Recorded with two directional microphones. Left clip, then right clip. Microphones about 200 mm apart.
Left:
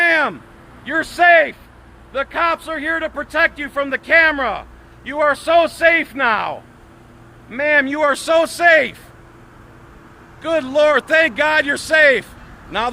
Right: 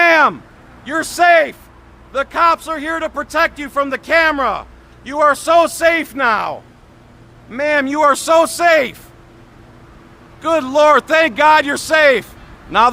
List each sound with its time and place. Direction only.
0.0 s vehicle: 35° right (ahead or behind)
0.9 s a man's voice: 15° right (ahead or behind)
10.4 s a man's voice: 30° right (ahead or behind)